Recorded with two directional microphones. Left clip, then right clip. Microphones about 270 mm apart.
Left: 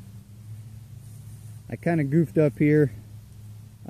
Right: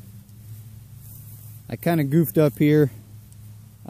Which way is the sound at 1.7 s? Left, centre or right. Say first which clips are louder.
Right 3 dB; centre.